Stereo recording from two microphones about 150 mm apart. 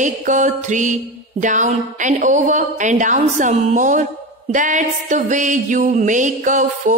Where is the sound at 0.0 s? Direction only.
55° right (ahead or behind).